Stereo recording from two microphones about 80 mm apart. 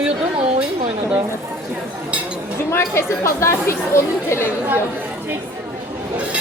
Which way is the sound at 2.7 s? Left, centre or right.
Left.